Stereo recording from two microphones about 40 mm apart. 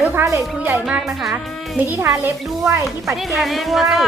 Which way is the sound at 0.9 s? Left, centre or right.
Right.